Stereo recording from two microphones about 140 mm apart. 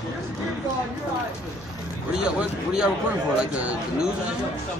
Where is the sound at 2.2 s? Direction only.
5° right (ahead or behind).